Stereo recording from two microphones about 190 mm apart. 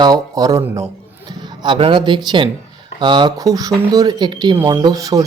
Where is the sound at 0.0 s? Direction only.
20° right (ahead or behind).